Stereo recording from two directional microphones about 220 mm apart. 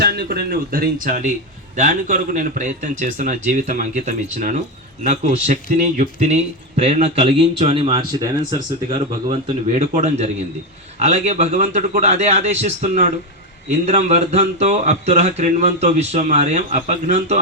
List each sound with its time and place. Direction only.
0.0 s a man's voice: 45° right (ahead or behind)
5.8 s a man's voice: 35° right (ahead or behind)